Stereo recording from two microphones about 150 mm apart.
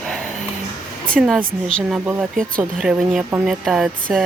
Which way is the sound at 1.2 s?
5° right (ahead or behind).